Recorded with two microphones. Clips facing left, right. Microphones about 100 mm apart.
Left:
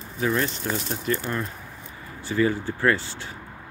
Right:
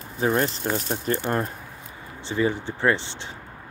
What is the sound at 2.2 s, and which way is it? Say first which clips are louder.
Speech: left 1 dB; 20° right (ahead or behind).